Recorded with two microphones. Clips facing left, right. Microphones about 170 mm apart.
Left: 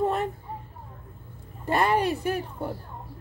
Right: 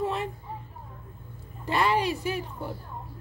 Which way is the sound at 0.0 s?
55° left (ahead or behind).